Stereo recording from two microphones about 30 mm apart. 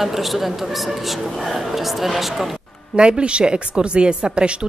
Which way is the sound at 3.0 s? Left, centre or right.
Right.